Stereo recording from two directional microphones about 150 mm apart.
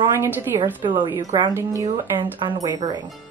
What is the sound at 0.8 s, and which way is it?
Speech, 30° right (ahead or behind).